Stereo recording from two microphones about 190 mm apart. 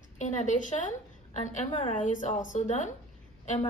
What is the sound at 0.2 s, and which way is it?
A woman's voice, 40° left (ahead or behind).